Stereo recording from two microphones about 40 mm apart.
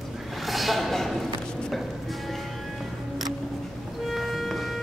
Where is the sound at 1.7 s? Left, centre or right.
Centre.